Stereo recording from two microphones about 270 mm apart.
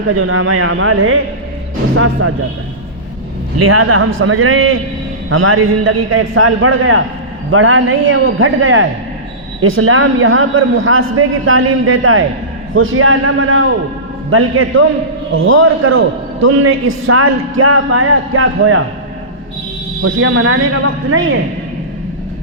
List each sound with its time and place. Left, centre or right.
0.1 s a man's voice: right
3.6 s a man's voice: right
16.8 s a man's voice: right
20.0 s a man's voice: right